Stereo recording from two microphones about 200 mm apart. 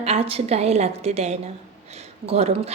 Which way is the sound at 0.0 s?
30° right (ahead or behind).